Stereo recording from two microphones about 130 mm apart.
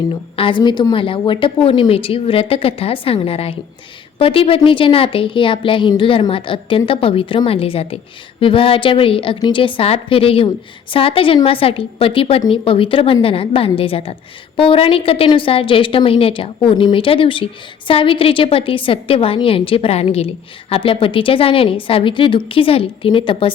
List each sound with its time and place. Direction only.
0.3 s a woman's voice: 40° left (ahead or behind)